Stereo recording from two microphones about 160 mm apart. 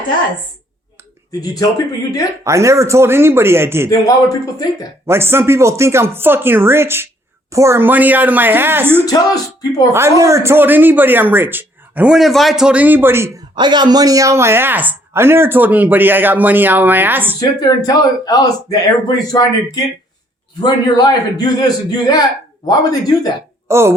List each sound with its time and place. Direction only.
1.3 s speech: 25° left (ahead or behind)
2.4 s speech: 20° right (ahead or behind)
3.8 s speech: 20° left (ahead or behind)
5.0 s speech: 15° right (ahead or behind)
9.0 s speech: 25° left (ahead or behind)
9.9 s speech: 15° right (ahead or behind)
13.6 s speech: 30° right (ahead or behind); by 17.3 s 10° right (ahead or behind)
17.6 s speech: 25° left (ahead or behind)
23.6 s speech: 15° right (ahead or behind)